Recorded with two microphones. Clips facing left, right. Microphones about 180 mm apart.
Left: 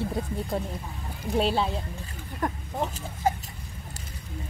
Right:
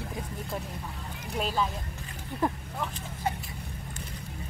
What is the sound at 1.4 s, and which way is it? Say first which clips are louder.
Speech: left 4 dB; 35° left (ahead or behind).